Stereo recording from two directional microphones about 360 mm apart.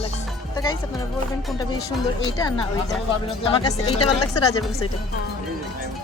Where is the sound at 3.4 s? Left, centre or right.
Centre.